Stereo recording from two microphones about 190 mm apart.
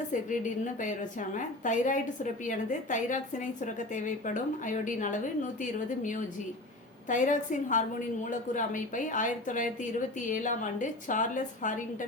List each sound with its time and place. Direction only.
0.1 s a woman's voice: 40° left (ahead or behind)